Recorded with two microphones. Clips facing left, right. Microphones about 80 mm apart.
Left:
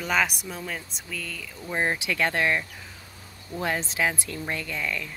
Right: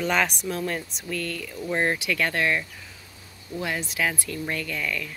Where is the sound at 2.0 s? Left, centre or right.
Left.